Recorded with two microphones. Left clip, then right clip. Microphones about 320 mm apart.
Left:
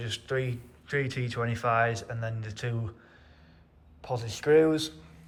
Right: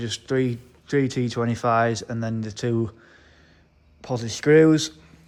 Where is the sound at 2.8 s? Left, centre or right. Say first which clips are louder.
Right 14 dB; right.